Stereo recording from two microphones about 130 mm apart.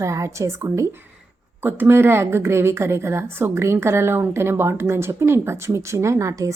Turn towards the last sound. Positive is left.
turn(degrees=-25)  # may be behind; listen again after turning